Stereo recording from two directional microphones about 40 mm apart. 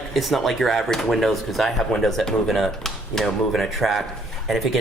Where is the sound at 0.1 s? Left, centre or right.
Centre.